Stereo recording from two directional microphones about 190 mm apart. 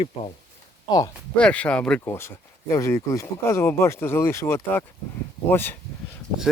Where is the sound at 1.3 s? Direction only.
5° left (ahead or behind).